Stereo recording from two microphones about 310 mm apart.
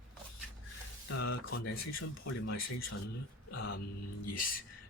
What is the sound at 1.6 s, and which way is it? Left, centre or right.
Speech, left.